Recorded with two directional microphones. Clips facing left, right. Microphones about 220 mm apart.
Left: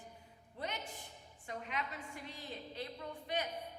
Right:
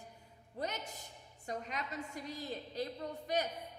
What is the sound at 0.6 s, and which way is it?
A woman's voice, 40° right (ahead or behind).